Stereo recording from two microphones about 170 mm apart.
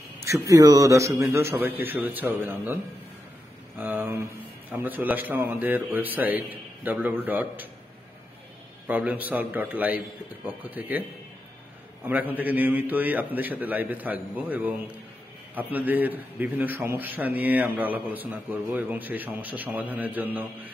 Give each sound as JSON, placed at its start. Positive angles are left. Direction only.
{"t": 0.2, "sound": "a man's voice", "side_deg": -20}
{"t": 8.8, "sound": "a man's voice", "side_deg": -10}